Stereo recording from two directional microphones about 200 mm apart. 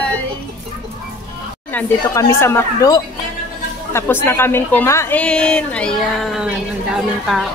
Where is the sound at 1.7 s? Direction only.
10° left (ahead or behind).